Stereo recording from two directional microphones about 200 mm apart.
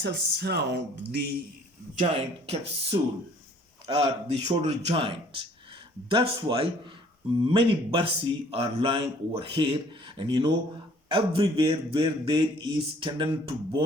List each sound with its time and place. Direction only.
0.0 s speech: 55° right (ahead or behind)
2.0 s a man's voice: 30° right (ahead or behind)